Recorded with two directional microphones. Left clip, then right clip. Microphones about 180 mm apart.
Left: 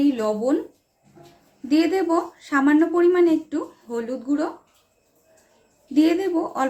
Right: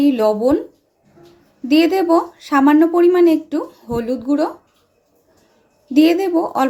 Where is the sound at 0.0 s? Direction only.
40° right (ahead or behind).